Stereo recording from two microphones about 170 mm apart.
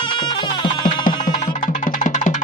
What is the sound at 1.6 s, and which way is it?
Music, 50° left (ahead or behind).